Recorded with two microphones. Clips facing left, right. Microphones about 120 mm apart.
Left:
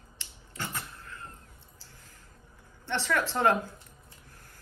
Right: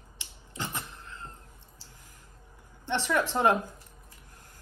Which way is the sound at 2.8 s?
15° right (ahead or behind).